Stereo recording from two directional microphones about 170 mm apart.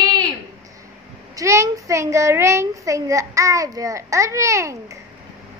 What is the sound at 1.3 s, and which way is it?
A child's voice, 20° right (ahead or behind).